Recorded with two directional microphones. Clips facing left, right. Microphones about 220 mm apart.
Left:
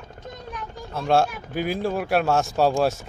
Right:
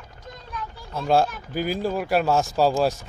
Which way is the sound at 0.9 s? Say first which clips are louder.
Even; centre (ahead or behind).